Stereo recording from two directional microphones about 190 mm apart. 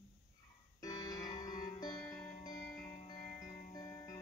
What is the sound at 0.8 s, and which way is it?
Music, 15° left (ahead or behind).